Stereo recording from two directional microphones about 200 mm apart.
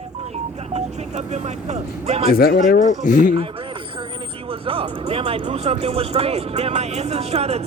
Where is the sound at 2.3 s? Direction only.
50° left (ahead or behind).